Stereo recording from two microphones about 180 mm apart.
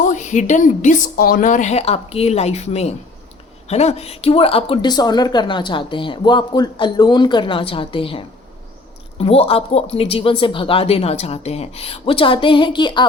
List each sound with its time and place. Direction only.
0.0 s speech: 45° left (ahead or behind); by 13.1 s 25° left (ahead or behind)